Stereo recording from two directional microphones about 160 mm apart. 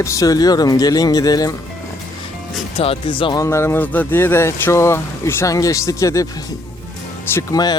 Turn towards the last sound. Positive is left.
turn(degrees=25)  # may be behind; listen again after turning